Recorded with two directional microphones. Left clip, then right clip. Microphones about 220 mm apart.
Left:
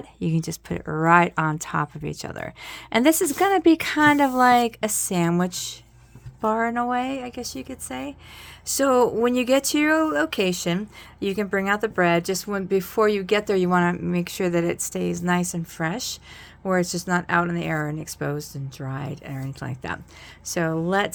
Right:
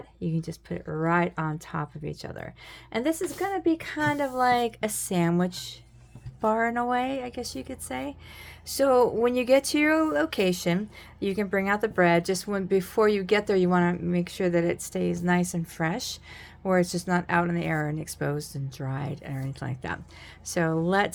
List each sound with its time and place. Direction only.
0.2 s speech: 35° left (ahead or behind); by 21.1 s 10° left (ahead or behind)